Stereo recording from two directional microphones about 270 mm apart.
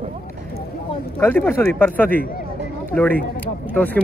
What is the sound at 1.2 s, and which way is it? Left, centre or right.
A man's voice, centre.